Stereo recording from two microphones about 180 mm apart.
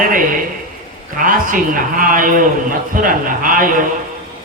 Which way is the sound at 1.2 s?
50° right (ahead or behind).